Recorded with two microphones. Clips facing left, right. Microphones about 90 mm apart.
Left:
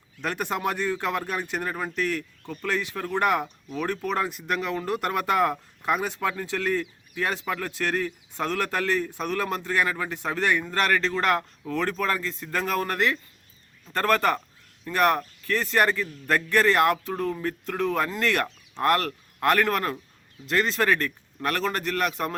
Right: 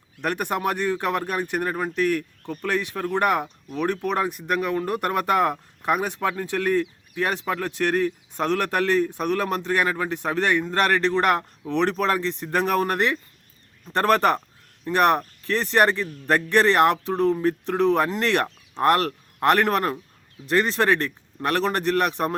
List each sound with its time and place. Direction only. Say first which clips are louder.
0.2 s speech: right 3 dB; 15° right (ahead or behind)